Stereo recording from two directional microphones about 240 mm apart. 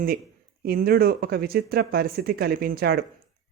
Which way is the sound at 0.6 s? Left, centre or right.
Right.